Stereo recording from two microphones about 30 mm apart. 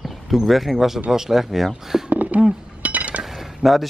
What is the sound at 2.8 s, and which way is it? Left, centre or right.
Chink, right.